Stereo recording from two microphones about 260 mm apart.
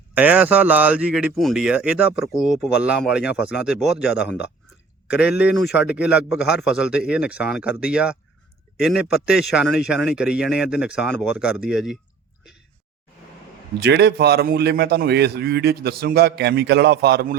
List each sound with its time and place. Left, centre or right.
0.1 s speech: centre
5.4 s speech: centre
13.7 s a man's voice: right